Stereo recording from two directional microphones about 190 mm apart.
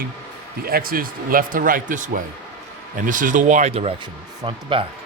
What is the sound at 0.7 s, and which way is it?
Speech, 50° right (ahead or behind).